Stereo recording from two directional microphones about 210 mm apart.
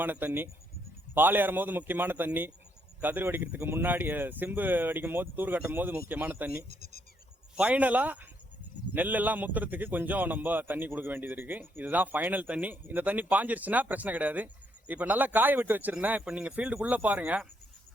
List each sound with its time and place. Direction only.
0.0 s a man's voice: 10° right (ahead or behind)
6.7 s speech: 45° left (ahead or behind)
7.5 s a man's voice: 5° right (ahead or behind)